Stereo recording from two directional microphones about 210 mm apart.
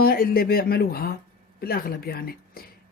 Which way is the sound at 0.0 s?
45° left (ahead or behind).